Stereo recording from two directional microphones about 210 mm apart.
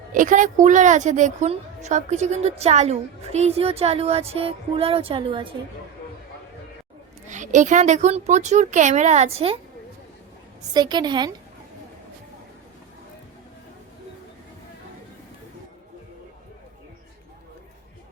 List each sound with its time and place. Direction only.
0.1 s a woman's voice: 40° right (ahead or behind)
7.3 s a woman's voice: 35° right (ahead or behind)
10.8 s a woman's voice: 20° right (ahead or behind)